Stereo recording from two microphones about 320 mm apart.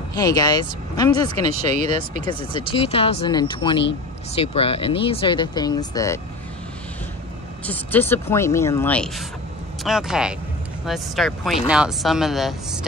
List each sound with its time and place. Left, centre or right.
0.1 s speech: centre
7.6 s speech: centre